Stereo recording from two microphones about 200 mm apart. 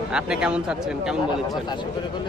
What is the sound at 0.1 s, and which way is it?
Speech, 5° right (ahead or behind).